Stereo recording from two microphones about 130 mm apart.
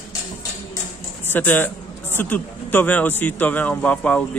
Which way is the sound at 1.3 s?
15° left (ahead or behind).